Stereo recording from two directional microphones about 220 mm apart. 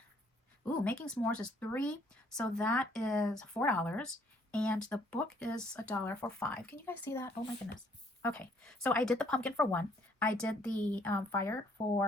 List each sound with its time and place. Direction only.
0.9 s speech: 5° left (ahead or behind)
11.8 s speech: 30° left (ahead or behind)